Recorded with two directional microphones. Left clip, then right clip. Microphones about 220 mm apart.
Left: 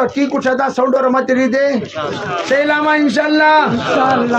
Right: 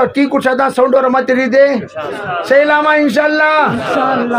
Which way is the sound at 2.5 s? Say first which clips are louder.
Right 4 dB; 40° right (ahead or behind).